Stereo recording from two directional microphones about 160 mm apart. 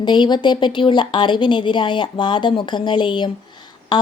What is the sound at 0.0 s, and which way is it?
Speech, 25° left (ahead or behind).